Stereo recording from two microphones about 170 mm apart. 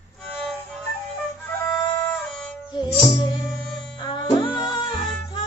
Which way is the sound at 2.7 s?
25° left (ahead or behind).